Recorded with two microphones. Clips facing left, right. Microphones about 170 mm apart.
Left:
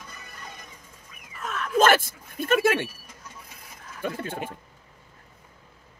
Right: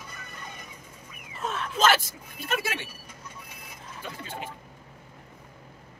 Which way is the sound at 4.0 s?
50° left (ahead or behind).